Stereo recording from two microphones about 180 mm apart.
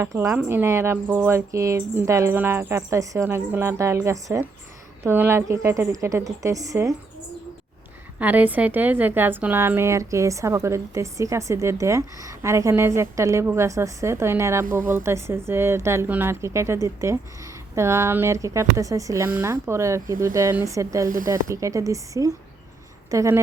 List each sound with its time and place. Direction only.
0.0 s a woman's voice: 15° right (ahead or behind)
8.2 s a woman's voice: 10° right (ahead or behind)